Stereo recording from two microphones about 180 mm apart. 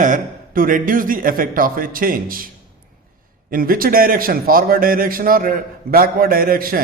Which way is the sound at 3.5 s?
55° right (ahead or behind).